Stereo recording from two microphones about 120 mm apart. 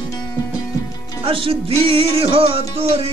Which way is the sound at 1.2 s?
45° right (ahead or behind).